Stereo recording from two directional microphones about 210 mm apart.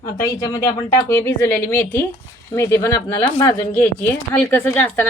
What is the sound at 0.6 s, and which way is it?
A woman's voice, 10° left (ahead or behind).